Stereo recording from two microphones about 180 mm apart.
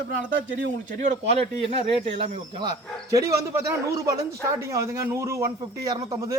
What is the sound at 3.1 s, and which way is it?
A man's voice, 20° right (ahead or behind).